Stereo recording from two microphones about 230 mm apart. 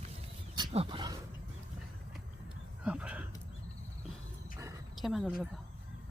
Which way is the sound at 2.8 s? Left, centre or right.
Centre.